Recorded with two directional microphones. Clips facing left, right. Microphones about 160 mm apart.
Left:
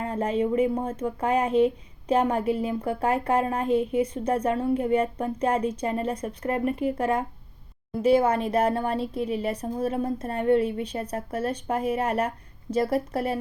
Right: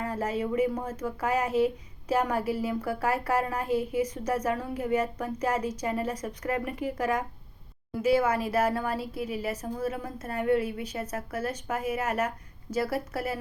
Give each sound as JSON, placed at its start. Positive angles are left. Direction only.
{"t": 0.0, "sound": "a woman's voice", "side_deg": 30}